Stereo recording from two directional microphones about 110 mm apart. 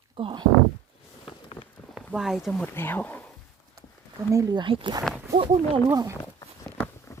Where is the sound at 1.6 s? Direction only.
50° left (ahead or behind).